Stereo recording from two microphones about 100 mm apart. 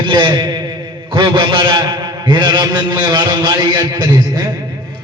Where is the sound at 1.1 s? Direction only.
50° right (ahead or behind).